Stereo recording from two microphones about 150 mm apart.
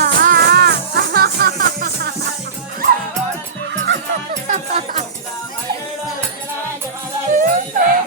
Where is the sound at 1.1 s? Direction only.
90° right.